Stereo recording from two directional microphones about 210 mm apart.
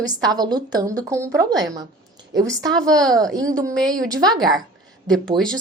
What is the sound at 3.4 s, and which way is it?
A woman's voice, 15° right (ahead or behind).